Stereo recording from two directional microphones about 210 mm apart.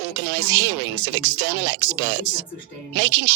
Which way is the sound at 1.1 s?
55° right (ahead or behind).